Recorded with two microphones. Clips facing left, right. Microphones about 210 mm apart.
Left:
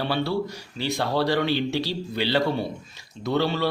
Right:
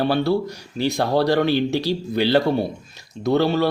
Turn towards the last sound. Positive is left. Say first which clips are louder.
# right 5 dB
turn(degrees=-45)  # may be behind; listen again after turning